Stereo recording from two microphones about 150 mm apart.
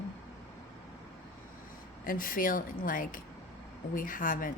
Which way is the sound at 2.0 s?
70° left (ahead or behind).